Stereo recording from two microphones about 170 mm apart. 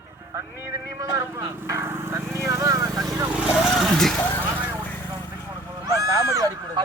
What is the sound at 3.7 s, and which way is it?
Speech, centre (ahead or behind).